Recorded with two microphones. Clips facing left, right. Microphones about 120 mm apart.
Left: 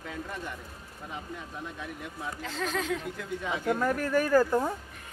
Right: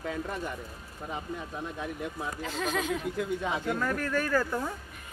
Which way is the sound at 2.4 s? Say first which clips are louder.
Right 1 dB; 10° right (ahead or behind).